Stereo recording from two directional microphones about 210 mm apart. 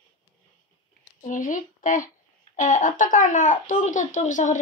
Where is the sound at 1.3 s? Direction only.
40° left (ahead or behind).